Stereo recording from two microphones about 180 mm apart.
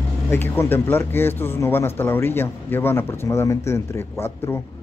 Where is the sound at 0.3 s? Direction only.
10° left (ahead or behind).